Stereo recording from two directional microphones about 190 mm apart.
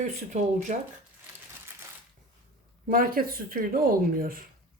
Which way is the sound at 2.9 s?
50° right (ahead or behind).